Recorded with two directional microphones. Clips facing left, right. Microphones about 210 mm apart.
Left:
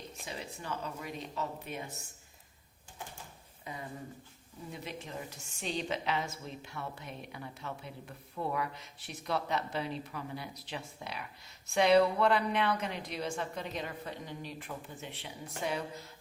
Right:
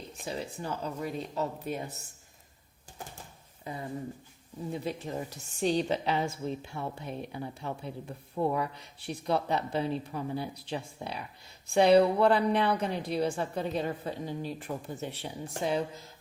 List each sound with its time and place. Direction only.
0.3 s a woman's voice: 35° right (ahead or behind)
3.6 s a woman's voice: 35° right (ahead or behind)